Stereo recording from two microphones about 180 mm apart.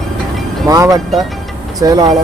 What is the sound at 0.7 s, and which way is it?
Speech, 20° right (ahead or behind).